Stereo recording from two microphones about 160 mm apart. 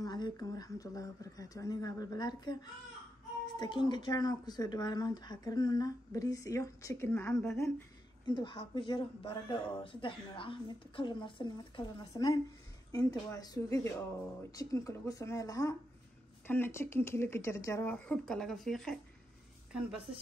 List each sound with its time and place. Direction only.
0.0 s speech: 25° left (ahead or behind)
8.3 s speech: 30° left (ahead or behind); by 18.9 s centre (ahead or behind)